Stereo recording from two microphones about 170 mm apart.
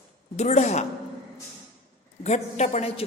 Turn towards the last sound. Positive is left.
turn(degrees=40)  # may be behind; listen again after turning